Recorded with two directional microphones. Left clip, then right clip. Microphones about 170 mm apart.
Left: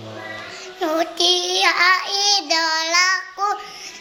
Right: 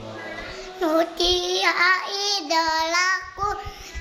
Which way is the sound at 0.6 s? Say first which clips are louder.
Even; 25° right (ahead or behind).